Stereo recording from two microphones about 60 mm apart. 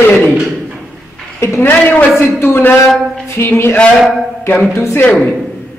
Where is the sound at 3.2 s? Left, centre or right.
Left.